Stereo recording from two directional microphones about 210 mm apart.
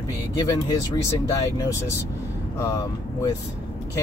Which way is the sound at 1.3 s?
15° left (ahead or behind).